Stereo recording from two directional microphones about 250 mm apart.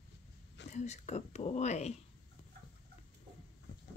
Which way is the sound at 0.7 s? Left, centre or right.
Left.